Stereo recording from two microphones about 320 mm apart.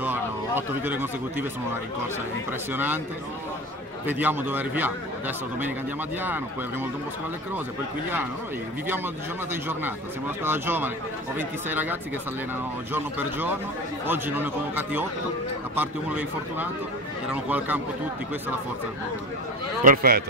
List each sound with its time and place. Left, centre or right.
0.0 s a sound: centre
2.7 s speech: centre
4.1 s speech: centre
9.5 s speech: centre
19.8 s a man's voice: right